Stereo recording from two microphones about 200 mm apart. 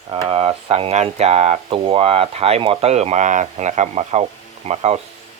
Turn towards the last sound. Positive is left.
turn(degrees=-30)  # may be behind; listen again after turning